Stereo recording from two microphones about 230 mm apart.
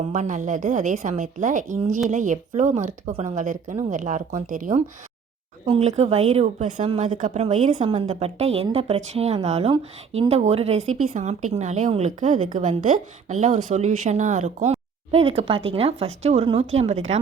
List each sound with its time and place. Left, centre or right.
0.1 s a woman's voice: right